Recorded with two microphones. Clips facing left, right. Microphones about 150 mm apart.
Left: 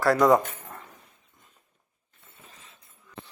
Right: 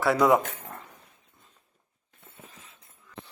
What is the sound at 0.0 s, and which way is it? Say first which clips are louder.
Speech: left 2 dB; centre (ahead or behind).